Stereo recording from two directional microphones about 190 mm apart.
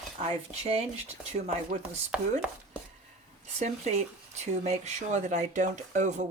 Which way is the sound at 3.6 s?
35° right (ahead or behind).